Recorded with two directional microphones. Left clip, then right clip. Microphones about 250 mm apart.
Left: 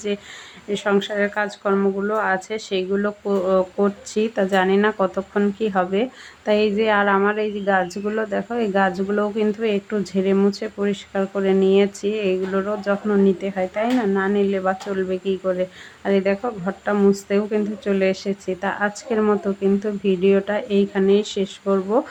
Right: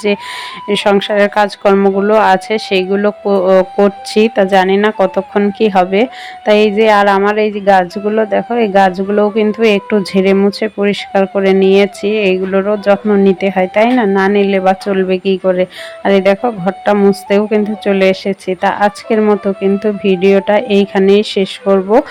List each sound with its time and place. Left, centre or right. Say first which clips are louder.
0.7 s speech: right 10 dB; right